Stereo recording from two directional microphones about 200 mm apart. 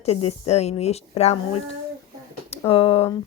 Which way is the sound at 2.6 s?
30° left (ahead or behind).